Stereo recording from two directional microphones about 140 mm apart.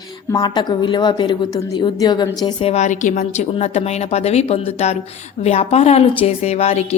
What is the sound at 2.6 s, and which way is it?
A woman's voice, 55° left (ahead or behind).